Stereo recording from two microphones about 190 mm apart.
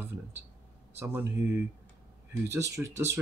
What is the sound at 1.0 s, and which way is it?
Speech, 15° right (ahead or behind).